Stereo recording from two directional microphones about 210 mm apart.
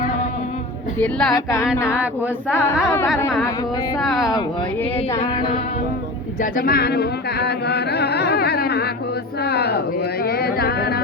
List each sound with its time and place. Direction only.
0.9 s speech: 5° left (ahead or behind)
2.8 s a sound: 10° left (ahead or behind)
4.0 s speech: centre (ahead or behind)
6.4 s music: 45° left (ahead or behind)
9.4 s speech: 50° left (ahead or behind)